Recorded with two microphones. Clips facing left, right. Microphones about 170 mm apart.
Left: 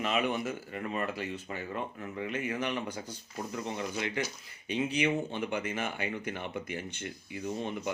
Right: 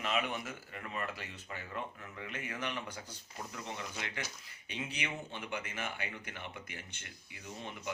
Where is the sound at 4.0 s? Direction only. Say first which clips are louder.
Left 9 dB; 25° left (ahead or behind).